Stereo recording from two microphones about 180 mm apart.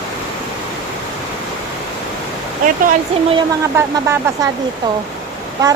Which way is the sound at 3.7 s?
15° right (ahead or behind).